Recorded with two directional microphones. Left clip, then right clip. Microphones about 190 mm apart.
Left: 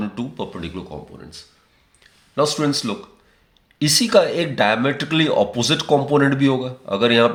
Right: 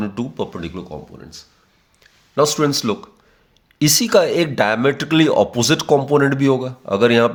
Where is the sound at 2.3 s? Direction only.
45° right (ahead or behind).